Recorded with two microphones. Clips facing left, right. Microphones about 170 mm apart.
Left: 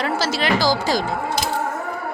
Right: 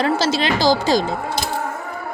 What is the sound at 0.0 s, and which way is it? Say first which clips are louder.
Speech: right 3 dB; 25° right (ahead or behind).